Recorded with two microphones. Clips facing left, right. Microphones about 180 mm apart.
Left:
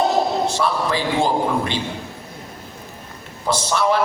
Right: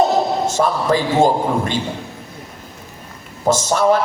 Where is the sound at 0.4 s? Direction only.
45° right (ahead or behind).